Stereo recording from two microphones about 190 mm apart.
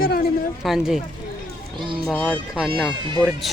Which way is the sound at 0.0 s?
50° left (ahead or behind).